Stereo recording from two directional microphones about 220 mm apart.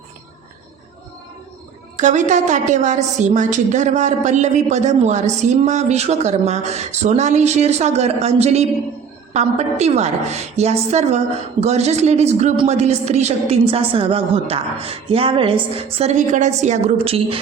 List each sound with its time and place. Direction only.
2.0 s a woman's voice: 35° right (ahead or behind)